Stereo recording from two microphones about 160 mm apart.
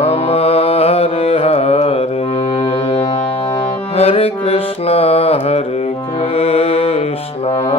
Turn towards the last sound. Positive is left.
turn(degrees=40)  # may be behind; listen again after turning